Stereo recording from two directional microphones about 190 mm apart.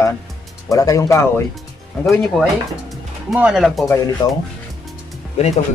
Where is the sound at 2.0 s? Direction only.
Centre (ahead or behind).